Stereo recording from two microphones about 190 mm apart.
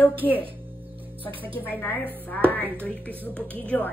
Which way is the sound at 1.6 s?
10° left (ahead or behind).